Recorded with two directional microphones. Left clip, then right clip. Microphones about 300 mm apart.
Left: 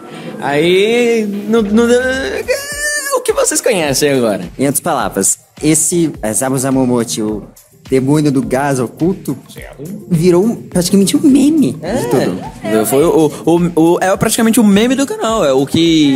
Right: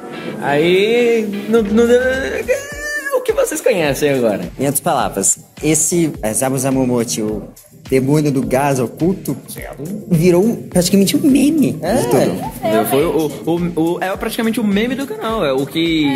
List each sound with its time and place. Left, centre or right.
0.4 s music: left
4.6 s a woman's voice: left
12.7 s speech: left